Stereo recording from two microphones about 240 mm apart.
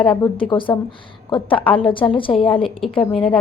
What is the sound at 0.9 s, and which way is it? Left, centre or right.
A woman's voice, left.